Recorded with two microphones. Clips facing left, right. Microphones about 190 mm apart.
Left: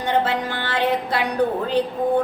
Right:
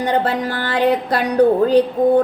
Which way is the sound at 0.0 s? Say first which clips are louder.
Right 3 dB; 40° right (ahead or behind).